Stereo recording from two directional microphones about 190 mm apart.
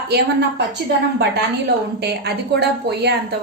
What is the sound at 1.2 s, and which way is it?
A woman's voice, 60° right (ahead or behind).